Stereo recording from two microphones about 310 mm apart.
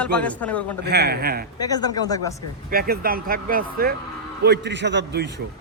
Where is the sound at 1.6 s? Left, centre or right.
Centre.